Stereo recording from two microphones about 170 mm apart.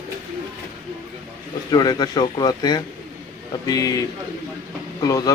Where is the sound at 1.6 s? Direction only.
25° left (ahead or behind).